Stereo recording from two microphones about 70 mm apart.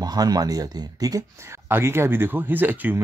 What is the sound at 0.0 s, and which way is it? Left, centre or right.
Speech, right.